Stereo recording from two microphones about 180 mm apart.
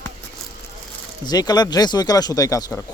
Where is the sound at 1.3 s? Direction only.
20° left (ahead or behind).